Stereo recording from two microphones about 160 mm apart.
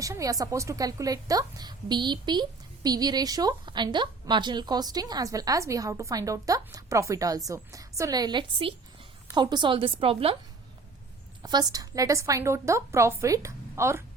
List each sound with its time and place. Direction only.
0.0 s a woman's voice: 20° right (ahead or behind); by 10.3 s 35° right (ahead or behind)
11.4 s a woman's voice: 25° right (ahead or behind)